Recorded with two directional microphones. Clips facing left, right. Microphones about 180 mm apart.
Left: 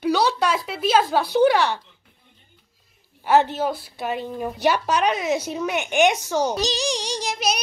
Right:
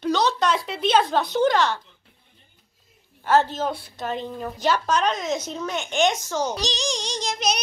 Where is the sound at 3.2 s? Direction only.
15° left (ahead or behind).